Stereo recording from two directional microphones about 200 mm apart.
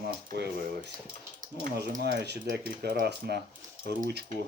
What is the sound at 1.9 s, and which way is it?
Speech, 55° right (ahead or behind).